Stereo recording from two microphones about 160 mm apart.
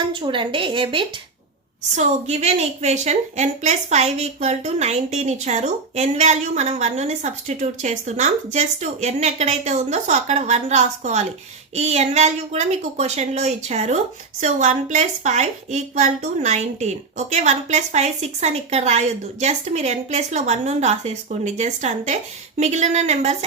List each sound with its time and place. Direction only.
0.0 s a woman's voice: 30° right (ahead or behind)
2.0 s a woman's voice: 45° right (ahead or behind)